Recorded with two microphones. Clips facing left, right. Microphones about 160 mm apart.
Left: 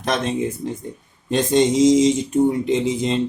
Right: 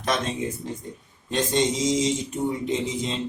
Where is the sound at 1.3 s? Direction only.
55° left (ahead or behind).